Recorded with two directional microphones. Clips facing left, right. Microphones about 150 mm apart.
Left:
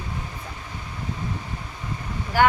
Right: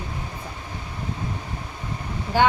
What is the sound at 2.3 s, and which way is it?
Speech, 25° right (ahead or behind).